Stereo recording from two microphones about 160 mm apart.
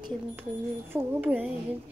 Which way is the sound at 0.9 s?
10° right (ahead or behind).